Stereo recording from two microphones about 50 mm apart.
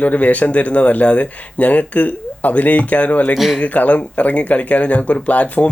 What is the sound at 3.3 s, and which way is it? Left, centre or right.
Speech, centre.